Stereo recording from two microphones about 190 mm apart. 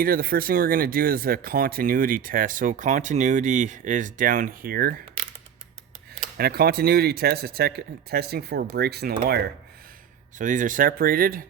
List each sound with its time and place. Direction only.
0.0 s speech: 50° right (ahead or behind)
6.3 s speech: 55° right (ahead or behind)
10.3 s speech: 45° right (ahead or behind)